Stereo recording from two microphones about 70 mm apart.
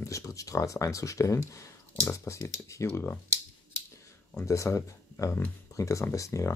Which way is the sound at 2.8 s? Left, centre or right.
Left.